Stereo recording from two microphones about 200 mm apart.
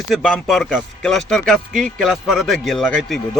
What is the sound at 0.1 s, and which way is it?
Speech, centre (ahead or behind).